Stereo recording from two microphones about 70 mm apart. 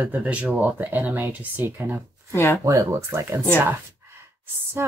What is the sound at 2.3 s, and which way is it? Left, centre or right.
Speech, left.